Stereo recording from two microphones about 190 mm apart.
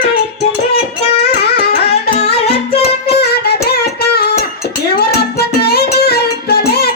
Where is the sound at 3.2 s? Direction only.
55° left (ahead or behind).